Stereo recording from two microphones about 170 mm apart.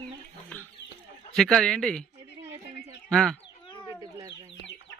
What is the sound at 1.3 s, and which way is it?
Speech, centre (ahead or behind).